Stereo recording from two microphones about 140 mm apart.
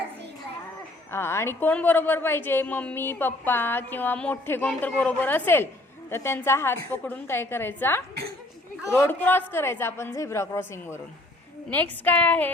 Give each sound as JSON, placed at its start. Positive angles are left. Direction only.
{"t": 1.1, "sound": "a woman's voice", "side_deg": 20}
{"t": 9.0, "sound": "a woman's voice", "side_deg": 15}